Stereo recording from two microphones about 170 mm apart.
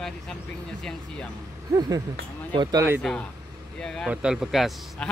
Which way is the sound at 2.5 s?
25° right (ahead or behind).